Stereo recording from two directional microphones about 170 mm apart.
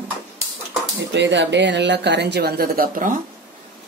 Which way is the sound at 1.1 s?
90° right.